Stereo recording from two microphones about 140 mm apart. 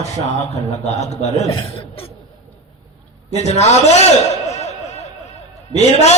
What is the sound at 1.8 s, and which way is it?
Cough, 40° left (ahead or behind).